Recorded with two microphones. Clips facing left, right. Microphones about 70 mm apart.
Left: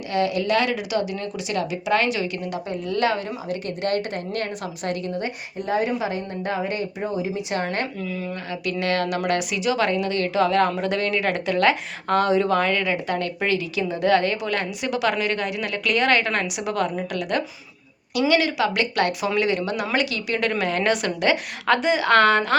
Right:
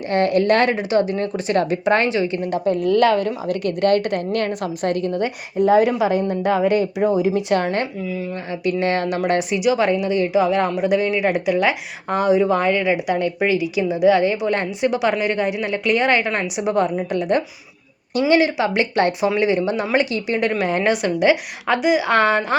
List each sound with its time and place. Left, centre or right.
0.1 s speech: right
3.5 s speech: left
3.8 s a woman's voice: right
5.2 s speech: right
7.9 s speech: centre
8.8 s speech: right
14.5 s speech: right